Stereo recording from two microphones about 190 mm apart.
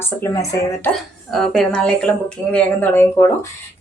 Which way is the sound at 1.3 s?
5° left (ahead or behind).